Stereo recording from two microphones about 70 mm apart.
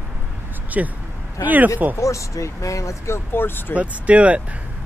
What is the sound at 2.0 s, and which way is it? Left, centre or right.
Speech, left.